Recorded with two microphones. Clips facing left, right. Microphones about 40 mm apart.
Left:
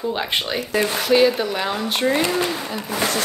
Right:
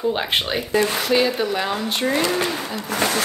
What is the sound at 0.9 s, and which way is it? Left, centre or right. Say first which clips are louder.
Speech: left 3 dB; centre.